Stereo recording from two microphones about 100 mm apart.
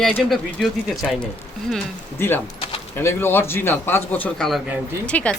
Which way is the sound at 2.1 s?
20° left (ahead or behind).